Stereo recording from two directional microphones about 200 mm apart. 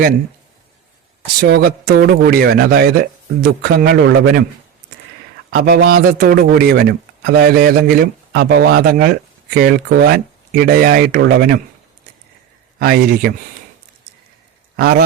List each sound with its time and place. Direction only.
1.4 s speech: 50° right (ahead or behind)
5.5 s speech: 50° right (ahead or behind)
12.8 s speech: 50° right (ahead or behind)
14.8 s speech: 50° right (ahead or behind)